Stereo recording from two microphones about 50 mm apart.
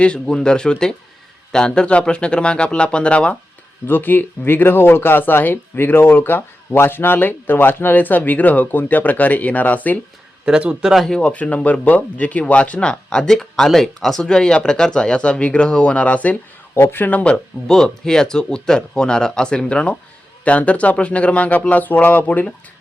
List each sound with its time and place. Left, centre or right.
0.0 s speech: centre
3.8 s speech: left
10.7 s speech: centre
11.1 s speech: left
16.8 s speech: left
17.1 s speech: left
17.7 s speech: centre; by 22.4 s left